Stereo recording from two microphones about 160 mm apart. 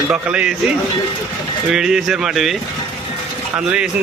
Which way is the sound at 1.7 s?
5° right (ahead or behind).